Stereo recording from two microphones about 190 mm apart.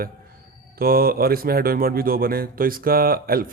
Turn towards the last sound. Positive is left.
turn(degrees=-50)  # may be behind; listen again after turning